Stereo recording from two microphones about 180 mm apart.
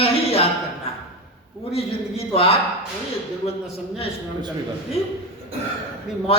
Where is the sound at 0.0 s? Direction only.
35° left (ahead or behind).